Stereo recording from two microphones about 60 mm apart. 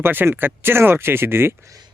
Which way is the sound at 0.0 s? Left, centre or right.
Right.